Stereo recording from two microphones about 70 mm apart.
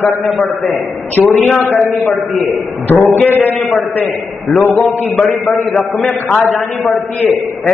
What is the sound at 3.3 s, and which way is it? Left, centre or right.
Speech, left.